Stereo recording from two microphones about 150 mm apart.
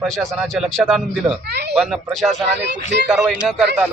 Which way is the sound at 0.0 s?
Centre (ahead or behind).